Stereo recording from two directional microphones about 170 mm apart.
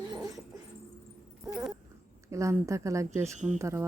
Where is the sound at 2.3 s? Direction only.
15° right (ahead or behind).